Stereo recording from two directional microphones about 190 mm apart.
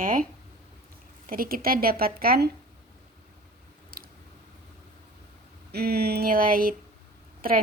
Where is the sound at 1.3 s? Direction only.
50° right (ahead or behind).